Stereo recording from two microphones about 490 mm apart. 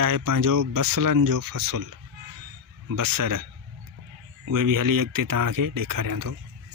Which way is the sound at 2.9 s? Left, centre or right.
Right.